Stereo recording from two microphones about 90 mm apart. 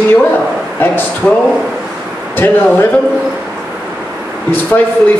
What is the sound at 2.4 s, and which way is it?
Speech, 20° left (ahead or behind).